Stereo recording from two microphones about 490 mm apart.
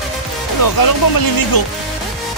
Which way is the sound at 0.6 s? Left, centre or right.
Left.